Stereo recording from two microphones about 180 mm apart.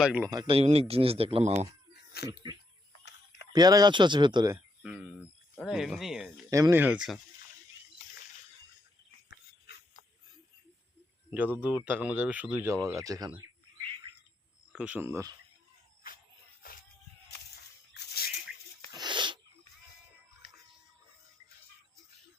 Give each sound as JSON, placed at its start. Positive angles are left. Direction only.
{"t": 0.0, "sound": "speech", "side_deg": -5}
{"t": 0.3, "sound": "speech", "side_deg": -25}
{"t": 1.9, "sound": "cat", "side_deg": 65}
{"t": 3.0, "sound": "a sound", "side_deg": 70}
{"t": 3.5, "sound": "speech", "side_deg": -20}
{"t": 4.8, "sound": "speech", "side_deg": -5}
{"t": 6.5, "sound": "speech", "side_deg": -15}
{"t": 11.3, "sound": "speech", "side_deg": -10}
{"t": 14.7, "sound": "speech", "side_deg": -5}
{"t": 17.9, "sound": "a sound", "side_deg": 60}
{"t": 18.9, "sound": "wheeze", "side_deg": -25}